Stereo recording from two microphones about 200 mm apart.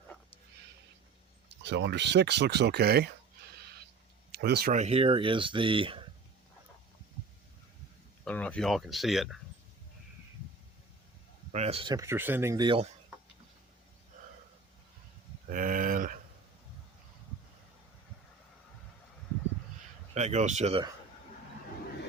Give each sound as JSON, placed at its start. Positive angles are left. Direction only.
{"t": 1.5, "sound": "speech", "side_deg": -60}
{"t": 4.3, "sound": "speech", "side_deg": -55}
{"t": 4.7, "sound": "speech", "side_deg": -30}
{"t": 8.2, "sound": "speech", "side_deg": 5}
{"t": 11.5, "sound": "speech", "side_deg": -30}
{"t": 15.4, "sound": "a sound", "side_deg": -40}
{"t": 20.1, "sound": "speech", "side_deg": -35}